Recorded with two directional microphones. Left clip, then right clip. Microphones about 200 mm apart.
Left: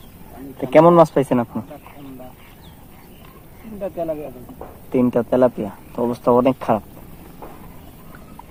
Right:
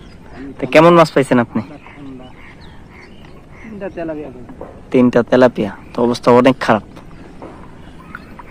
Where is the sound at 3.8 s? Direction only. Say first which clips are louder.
Even; 30° left (ahead or behind).